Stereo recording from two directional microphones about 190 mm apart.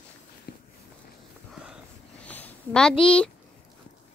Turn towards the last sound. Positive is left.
turn(degrees=5)  # may be behind; listen again after turning